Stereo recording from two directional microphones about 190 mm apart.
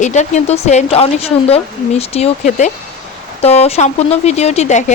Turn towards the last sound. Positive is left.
turn(degrees=40)  # may be behind; listen again after turning